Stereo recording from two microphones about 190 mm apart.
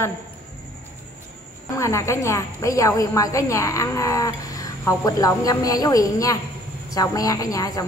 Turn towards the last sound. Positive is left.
turn(degrees=20)  # may be behind; listen again after turning